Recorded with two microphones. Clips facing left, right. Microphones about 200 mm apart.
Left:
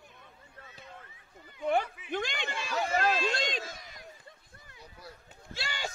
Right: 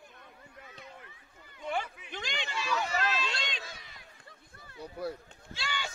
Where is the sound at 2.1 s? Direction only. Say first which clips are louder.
Left 4 dB; 55° left (ahead or behind).